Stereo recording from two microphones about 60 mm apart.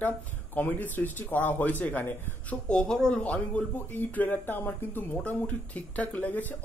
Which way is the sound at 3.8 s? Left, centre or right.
Left.